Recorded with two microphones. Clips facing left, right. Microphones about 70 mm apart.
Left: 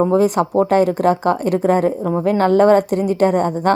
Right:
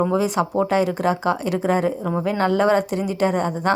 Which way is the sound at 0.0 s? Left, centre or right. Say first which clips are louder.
Left 5 dB; left.